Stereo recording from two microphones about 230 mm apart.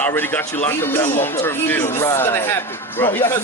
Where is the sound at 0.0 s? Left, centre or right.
Centre.